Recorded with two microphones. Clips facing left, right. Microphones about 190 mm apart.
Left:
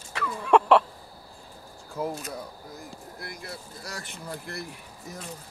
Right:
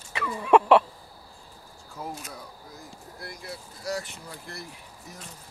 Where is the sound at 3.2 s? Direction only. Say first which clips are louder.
Right 1 dB; 55° left (ahead or behind).